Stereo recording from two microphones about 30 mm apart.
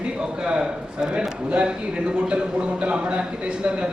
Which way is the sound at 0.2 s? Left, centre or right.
Right.